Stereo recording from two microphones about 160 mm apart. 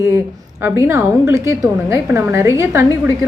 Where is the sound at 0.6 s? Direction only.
15° right (ahead or behind).